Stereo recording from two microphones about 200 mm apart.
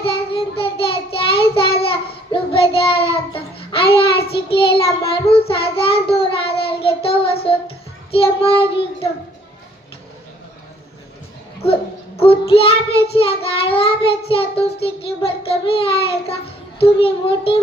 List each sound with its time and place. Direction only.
0.0 s child singing: 25° left (ahead or behind)
11.6 s child singing: 30° left (ahead or behind)
16.8 s a child's voice: 30° left (ahead or behind)